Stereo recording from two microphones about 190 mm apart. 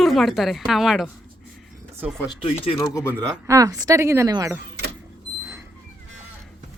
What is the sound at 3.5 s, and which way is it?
Speech, 15° right (ahead or behind).